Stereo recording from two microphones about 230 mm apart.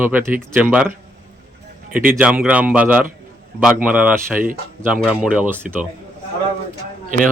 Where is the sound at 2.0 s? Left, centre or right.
Centre.